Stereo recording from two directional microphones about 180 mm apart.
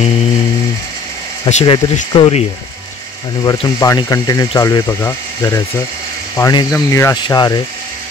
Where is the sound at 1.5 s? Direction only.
25° left (ahead or behind).